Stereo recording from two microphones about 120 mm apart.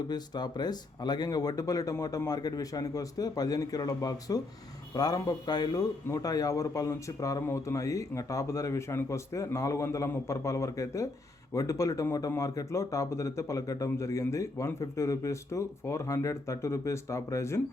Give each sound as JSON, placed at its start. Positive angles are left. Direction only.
{"t": 0.1, "sound": "a man's voice", "side_deg": 35}